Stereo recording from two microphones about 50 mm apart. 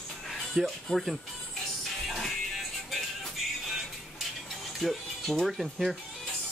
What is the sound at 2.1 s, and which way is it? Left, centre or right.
Music, centre.